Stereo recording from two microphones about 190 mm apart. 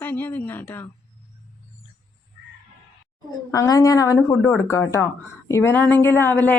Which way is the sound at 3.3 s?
20° left (ahead or behind).